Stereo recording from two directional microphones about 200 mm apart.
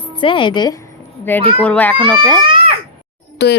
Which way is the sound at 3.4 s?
55° left (ahead or behind).